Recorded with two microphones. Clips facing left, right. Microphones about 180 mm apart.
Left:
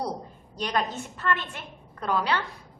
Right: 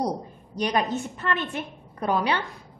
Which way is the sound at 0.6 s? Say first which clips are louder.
Right 4 dB; 15° right (ahead or behind).